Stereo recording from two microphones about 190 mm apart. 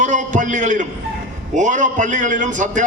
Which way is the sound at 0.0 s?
40° right (ahead or behind).